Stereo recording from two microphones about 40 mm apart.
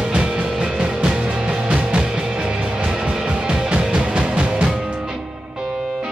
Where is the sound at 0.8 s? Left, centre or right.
Right.